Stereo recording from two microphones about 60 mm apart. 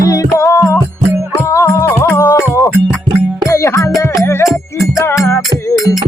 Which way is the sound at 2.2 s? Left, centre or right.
Left.